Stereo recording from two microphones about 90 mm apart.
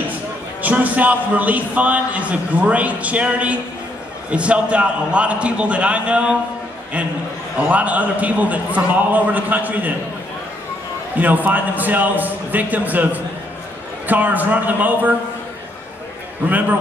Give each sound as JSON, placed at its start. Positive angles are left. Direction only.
{"t": 0.6, "sound": "a man's voice", "side_deg": -15}
{"t": 7.5, "sound": "a man's voice", "side_deg": -15}
{"t": 11.1, "sound": "a man's voice", "side_deg": -20}